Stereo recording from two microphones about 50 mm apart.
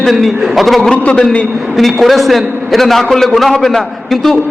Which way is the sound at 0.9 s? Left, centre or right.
Left.